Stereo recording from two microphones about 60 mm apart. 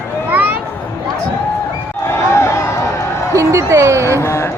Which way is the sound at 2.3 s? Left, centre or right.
Left.